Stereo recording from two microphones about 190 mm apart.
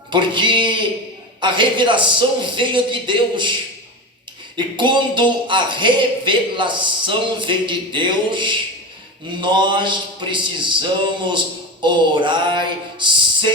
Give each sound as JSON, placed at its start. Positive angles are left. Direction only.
{"t": 0.1, "sound": "speech", "side_deg": -25}
{"t": 4.5, "sound": "speech", "side_deg": -25}